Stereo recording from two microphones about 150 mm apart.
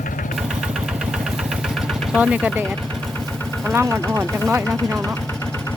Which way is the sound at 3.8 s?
20° right (ahead or behind).